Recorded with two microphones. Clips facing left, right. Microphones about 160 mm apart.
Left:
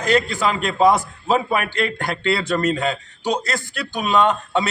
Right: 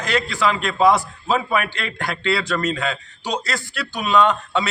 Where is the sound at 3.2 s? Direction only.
50° left (ahead or behind).